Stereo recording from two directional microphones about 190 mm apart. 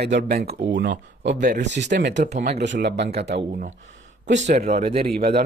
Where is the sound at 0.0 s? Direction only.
60° right (ahead or behind).